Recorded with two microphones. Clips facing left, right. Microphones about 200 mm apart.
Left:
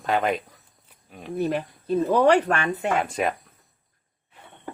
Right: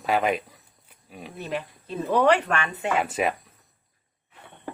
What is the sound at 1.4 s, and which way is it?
Speech, 45° left (ahead or behind).